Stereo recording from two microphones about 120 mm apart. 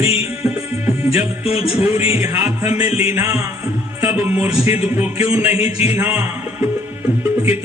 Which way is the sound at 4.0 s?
15° right (ahead or behind).